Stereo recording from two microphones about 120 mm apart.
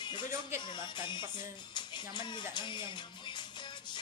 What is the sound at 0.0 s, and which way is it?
Music, 40° left (ahead or behind).